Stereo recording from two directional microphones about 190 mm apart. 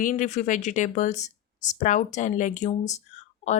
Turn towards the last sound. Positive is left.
turn(degrees=35)  # may be behind; listen again after turning